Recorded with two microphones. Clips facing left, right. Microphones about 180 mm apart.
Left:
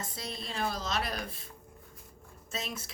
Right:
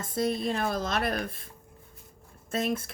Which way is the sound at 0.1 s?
50° right (ahead or behind).